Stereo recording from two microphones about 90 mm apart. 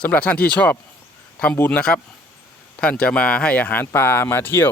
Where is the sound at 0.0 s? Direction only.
15° left (ahead or behind).